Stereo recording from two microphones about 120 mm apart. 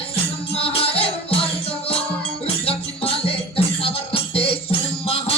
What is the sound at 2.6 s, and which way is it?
Music, 55° left (ahead or behind).